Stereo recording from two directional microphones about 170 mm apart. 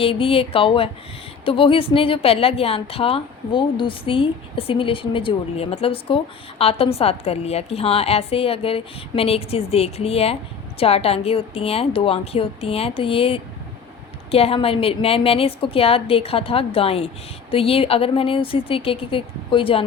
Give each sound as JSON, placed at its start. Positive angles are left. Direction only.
{"t": 0.0, "sound": "a woman's voice", "side_deg": 35}